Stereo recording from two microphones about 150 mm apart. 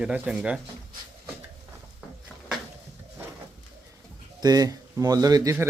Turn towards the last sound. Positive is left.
turn(degrees=-20)  # may be behind; listen again after turning